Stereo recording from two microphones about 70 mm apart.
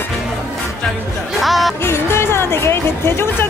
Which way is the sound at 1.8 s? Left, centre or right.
Left.